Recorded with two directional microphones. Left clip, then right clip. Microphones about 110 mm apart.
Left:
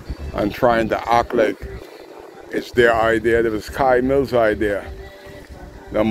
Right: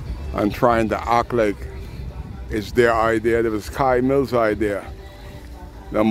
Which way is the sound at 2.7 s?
35° right (ahead or behind).